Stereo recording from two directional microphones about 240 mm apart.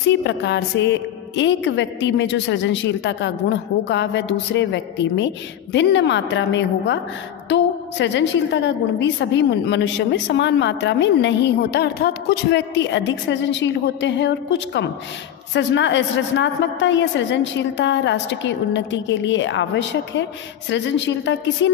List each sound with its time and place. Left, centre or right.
0.2 s a woman's voice: left